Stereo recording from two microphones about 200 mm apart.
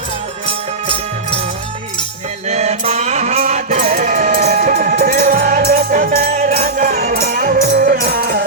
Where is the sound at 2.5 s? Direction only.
30° right (ahead or behind).